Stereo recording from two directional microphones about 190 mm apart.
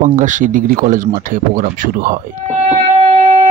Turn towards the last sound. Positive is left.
turn(degrees=-35)  # may be behind; listen again after turning